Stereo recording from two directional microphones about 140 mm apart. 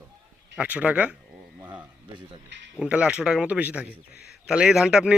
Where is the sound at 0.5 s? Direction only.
10° right (ahead or behind).